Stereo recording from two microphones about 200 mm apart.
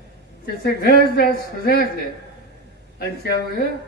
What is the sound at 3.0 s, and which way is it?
Speech, 55° left (ahead or behind).